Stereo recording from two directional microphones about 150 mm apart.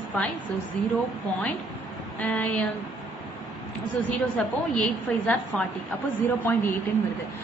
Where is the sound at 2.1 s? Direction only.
10° left (ahead or behind).